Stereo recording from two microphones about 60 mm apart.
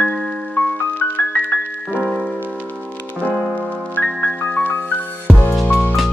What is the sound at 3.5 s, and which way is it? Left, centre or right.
Music, left.